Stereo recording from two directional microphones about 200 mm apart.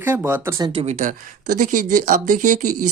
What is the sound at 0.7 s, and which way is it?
Speech, 30° right (ahead or behind).